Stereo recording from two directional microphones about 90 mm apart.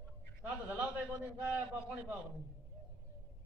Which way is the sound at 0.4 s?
15° right (ahead or behind).